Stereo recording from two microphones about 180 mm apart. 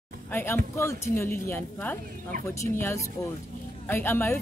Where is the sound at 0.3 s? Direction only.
10° left (ahead or behind).